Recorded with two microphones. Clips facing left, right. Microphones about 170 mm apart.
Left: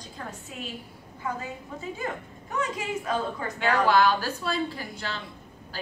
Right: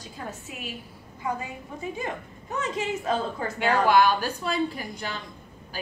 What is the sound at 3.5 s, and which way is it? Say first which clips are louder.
A woman's voice: right 2 dB; 15° right (ahead or behind).